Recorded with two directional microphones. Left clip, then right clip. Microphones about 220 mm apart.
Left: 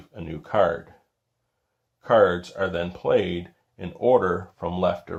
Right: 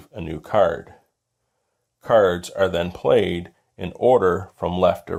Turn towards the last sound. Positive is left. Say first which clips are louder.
# right 5 dB
turn(degrees=-45)  # may be behind; listen again after turning